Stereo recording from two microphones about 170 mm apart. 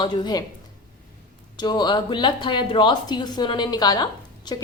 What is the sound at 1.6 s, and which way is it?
A woman's voice, 25° left (ahead or behind).